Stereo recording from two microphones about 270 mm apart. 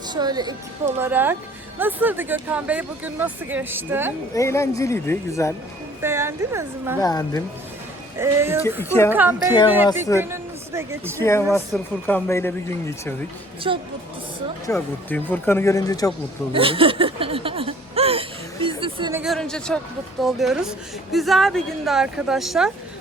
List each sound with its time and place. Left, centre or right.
0.1 s a woman's voice: centre
4.4 s speech: centre
6.0 s speech: centre
7.0 s speech: centre
8.2 s speech: centre
9.7 s speech: centre
11.2 s speech: centre
13.7 s speech: centre
14.7 s speech: centre
16.5 s a sound: centre
19.2 s a woman's voice: centre